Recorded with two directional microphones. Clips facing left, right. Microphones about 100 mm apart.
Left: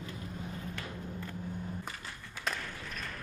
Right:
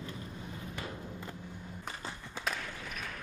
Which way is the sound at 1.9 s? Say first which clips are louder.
Right 3 dB; 25° right (ahead or behind).